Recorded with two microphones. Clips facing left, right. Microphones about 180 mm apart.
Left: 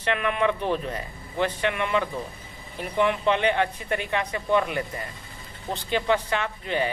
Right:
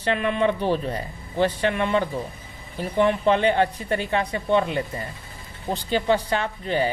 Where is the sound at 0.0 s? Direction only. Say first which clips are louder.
Right 2 dB; 35° right (ahead or behind).